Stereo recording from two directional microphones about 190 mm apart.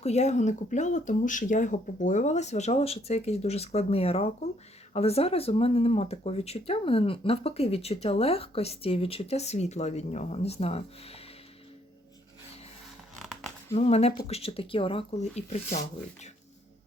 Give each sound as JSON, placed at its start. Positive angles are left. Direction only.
{"t": 0.0, "sound": "speech", "side_deg": 35}
{"t": 13.7, "sound": "speech", "side_deg": 35}